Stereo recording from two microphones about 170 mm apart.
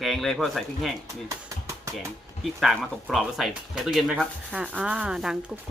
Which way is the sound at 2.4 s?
Centre (ahead or behind).